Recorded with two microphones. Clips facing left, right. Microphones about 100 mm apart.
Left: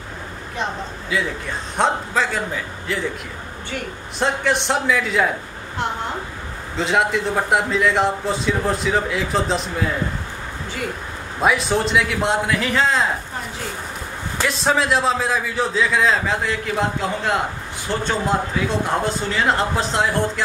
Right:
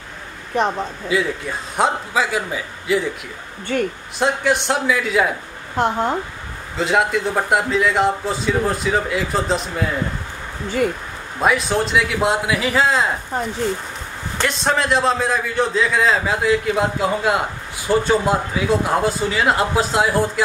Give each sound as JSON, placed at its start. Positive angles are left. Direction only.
{"t": 1.1, "sound": "a man's voice", "side_deg": -5}
{"t": 3.7, "sound": "a woman's voice", "side_deg": -45}
{"t": 4.2, "sound": "a man's voice", "side_deg": 0}
{"t": 5.8, "sound": "a woman's voice", "side_deg": -45}
{"t": 6.8, "sound": "a man's voice", "side_deg": 0}
{"t": 11.4, "sound": "a man's voice", "side_deg": 0}
{"t": 14.4, "sound": "a man's voice", "side_deg": 0}